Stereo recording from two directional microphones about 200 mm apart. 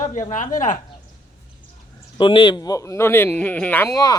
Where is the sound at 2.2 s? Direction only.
25° left (ahead or behind).